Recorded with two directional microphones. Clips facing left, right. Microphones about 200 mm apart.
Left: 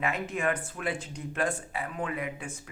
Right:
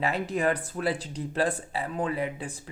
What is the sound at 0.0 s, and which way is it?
Speech, 35° right (ahead or behind).